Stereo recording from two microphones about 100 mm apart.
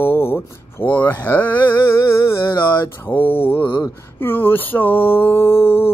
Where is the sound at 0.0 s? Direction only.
25° left (ahead or behind).